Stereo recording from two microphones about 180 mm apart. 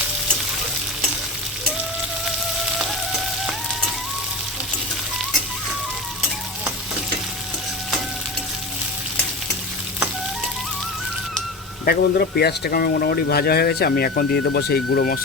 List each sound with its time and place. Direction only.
11.9 s speech: 60° left (ahead or behind)